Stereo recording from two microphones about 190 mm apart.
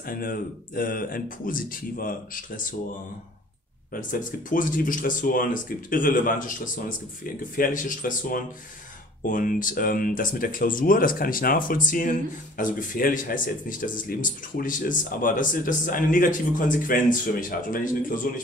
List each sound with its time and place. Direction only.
0.0 s speech: 50° left (ahead or behind)
3.9 s speech: 45° left (ahead or behind)